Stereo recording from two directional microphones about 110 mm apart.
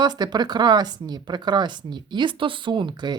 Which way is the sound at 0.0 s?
40° right (ahead or behind).